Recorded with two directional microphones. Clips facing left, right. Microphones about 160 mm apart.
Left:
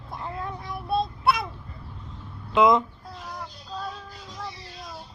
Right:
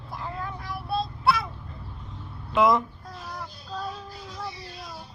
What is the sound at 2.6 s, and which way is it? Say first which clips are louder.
Speech: left 2 dB; 20° left (ahead or behind).